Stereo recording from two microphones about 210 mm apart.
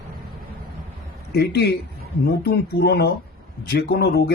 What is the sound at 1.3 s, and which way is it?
A man's voice, 50° left (ahead or behind).